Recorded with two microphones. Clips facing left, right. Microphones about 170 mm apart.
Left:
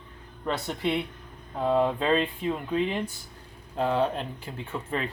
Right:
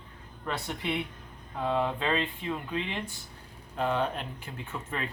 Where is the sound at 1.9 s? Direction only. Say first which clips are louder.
Left 5 dB; 40° left (ahead or behind).